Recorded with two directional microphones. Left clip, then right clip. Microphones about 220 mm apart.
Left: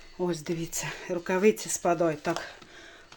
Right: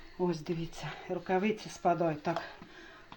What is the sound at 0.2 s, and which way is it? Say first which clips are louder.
Speech: left 3 dB; 30° left (ahead or behind).